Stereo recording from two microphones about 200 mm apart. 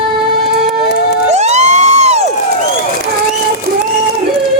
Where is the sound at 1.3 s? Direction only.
35° right (ahead or behind).